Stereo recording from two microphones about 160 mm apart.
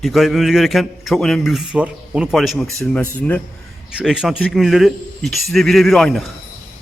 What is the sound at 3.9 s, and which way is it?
A man's voice, 5° right (ahead or behind).